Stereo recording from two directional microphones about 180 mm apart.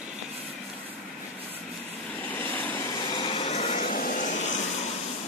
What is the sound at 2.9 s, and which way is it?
Vehicle, 25° left (ahead or behind).